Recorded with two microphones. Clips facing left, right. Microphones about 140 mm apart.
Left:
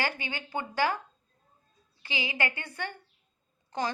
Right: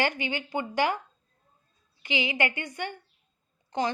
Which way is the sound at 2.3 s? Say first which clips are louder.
Right 4 dB; 20° right (ahead or behind).